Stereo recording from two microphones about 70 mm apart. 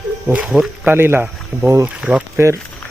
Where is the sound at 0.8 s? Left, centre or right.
Right.